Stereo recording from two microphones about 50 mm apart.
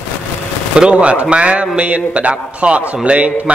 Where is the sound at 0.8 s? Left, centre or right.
Right.